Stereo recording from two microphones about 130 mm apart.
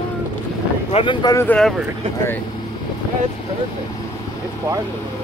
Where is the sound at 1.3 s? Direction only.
15° left (ahead or behind).